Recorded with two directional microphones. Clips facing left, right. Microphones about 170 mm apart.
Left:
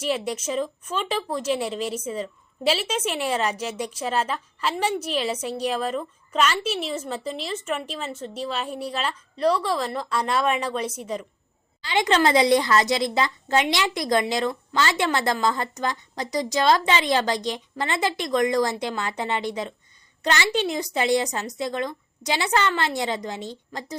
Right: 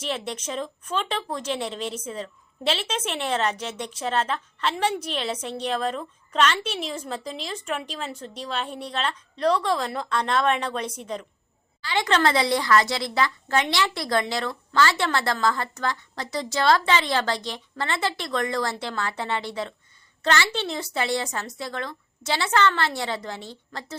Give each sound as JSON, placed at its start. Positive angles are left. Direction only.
{"t": 0.0, "sound": "speech", "side_deg": 10}
{"t": 11.8, "sound": "speech", "side_deg": 20}